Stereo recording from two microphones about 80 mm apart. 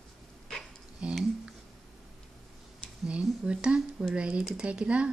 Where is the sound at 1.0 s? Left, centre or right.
Centre.